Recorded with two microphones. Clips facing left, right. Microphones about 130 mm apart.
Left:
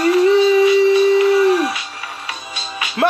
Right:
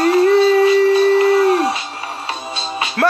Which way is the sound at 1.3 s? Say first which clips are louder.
Even; 60° right (ahead or behind).